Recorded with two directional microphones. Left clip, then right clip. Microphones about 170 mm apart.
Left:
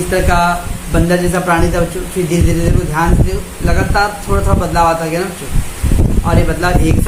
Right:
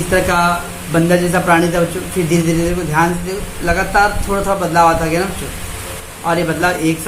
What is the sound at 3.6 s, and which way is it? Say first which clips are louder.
Speech: right 1 dB; 5° left (ahead or behind).